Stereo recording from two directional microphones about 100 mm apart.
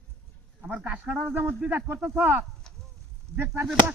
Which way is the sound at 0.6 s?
15° right (ahead or behind).